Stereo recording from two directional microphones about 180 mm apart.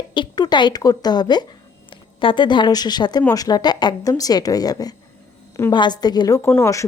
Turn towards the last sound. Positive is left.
turn(degrees=15)  # may be behind; listen again after turning